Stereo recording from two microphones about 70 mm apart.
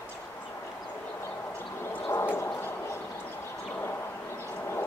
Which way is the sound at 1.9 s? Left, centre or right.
Left.